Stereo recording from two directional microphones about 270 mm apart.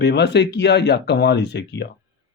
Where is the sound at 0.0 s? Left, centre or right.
Left.